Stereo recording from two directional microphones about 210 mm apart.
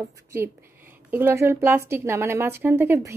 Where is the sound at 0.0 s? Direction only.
15° right (ahead or behind).